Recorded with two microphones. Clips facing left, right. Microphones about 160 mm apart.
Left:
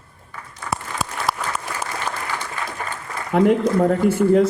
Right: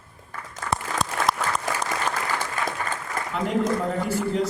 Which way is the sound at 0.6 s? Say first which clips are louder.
Even; 5° left (ahead or behind).